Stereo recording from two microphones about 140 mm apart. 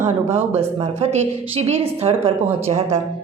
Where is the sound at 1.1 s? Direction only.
50° right (ahead or behind).